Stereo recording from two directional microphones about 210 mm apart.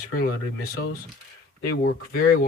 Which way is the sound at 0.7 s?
45° left (ahead or behind).